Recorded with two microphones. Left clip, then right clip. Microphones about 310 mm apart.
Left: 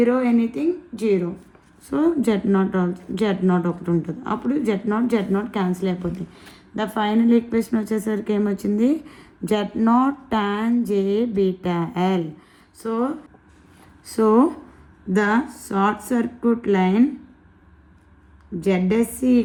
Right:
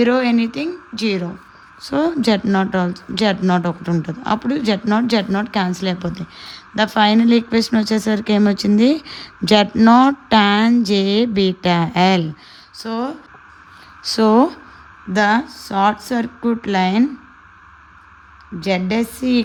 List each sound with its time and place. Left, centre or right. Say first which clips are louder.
0.0 s speech: right 3 dB; right
14.2 s speech: right 3 dB; right
18.6 s speech: right 1 dB; right